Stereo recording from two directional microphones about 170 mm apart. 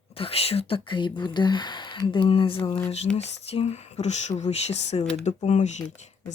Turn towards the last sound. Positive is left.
turn(degrees=45)  # may be behind; listen again after turning